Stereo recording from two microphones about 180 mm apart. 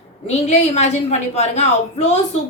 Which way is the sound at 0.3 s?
40° left (ahead or behind).